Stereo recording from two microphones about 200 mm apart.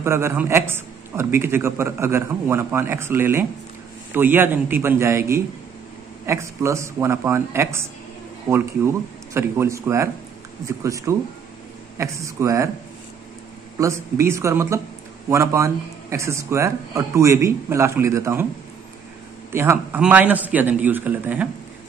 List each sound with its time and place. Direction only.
0.0 s a man's voice: 15° right (ahead or behind)
13.7 s a man's voice: 15° right (ahead or behind)
19.5 s a man's voice: 10° right (ahead or behind)